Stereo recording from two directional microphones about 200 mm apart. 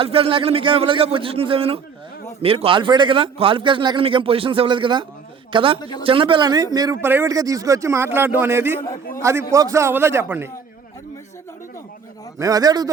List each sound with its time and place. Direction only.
0.0 s a man's voice: 30° right (ahead or behind); by 10.5 s 10° right (ahead or behind)
12.4 s a man's voice: 20° right (ahead or behind)